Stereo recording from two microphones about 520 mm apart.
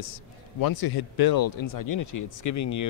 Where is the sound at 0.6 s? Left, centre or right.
Left.